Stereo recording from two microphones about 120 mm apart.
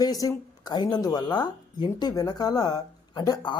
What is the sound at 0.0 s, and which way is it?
Speech, 30° left (ahead or behind).